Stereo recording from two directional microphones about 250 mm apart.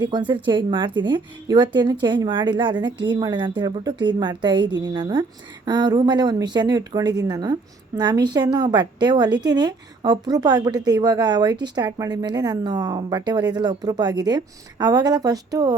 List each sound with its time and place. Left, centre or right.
0.1 s a woman's voice: centre